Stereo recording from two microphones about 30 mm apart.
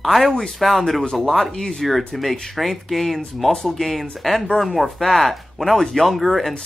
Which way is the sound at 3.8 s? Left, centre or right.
Centre.